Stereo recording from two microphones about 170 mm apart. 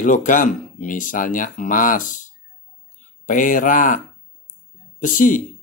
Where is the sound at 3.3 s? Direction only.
50° left (ahead or behind).